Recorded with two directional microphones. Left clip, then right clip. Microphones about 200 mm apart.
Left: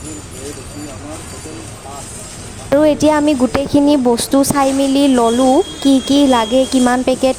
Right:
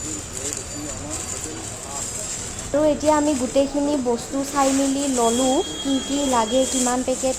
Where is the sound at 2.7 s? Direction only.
50° left (ahead or behind).